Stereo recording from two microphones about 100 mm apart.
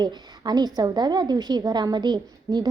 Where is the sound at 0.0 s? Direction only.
45° right (ahead or behind).